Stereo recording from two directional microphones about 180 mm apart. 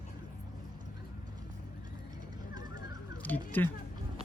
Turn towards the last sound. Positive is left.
turn(degrees=10)  # may be behind; listen again after turning